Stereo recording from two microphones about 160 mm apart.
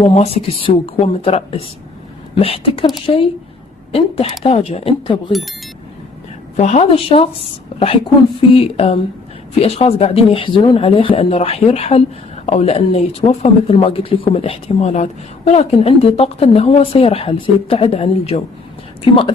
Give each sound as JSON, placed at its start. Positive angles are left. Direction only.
{"t": 0.0, "sound": "speech", "side_deg": 40}
{"t": 3.9, "sound": "speech", "side_deg": 40}
{"t": 6.5, "sound": "speech", "side_deg": 45}